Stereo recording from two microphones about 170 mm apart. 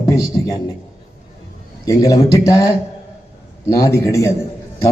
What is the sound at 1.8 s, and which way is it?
Speech, 20° left (ahead or behind).